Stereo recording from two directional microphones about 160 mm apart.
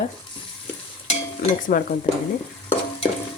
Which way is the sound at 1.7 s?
60° left (ahead or behind).